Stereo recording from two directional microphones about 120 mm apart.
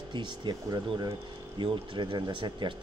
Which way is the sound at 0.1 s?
40° right (ahead or behind).